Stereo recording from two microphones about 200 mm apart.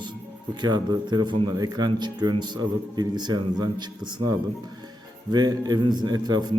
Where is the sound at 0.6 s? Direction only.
20° right (ahead or behind).